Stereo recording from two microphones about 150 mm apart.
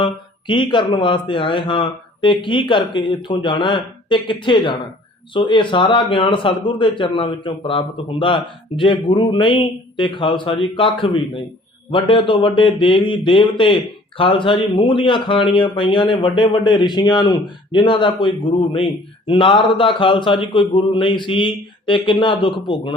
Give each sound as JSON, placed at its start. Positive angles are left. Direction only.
{"t": 0.0, "sound": "speech", "side_deg": 35}